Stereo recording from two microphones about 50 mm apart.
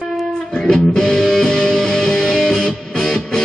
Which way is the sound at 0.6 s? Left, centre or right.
Centre.